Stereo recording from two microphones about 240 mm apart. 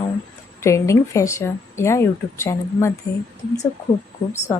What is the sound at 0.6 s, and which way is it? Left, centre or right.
A woman's voice, centre.